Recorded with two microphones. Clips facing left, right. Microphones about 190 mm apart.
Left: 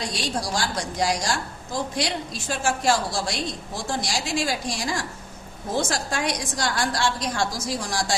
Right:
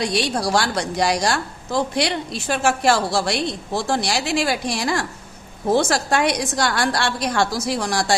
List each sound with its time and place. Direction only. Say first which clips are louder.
0.0 s a woman's voice: right 7 dB; 65° right (ahead or behind)